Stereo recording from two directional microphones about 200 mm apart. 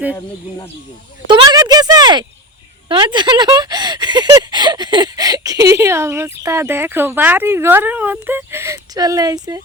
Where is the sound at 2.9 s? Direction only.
25° right (ahead or behind).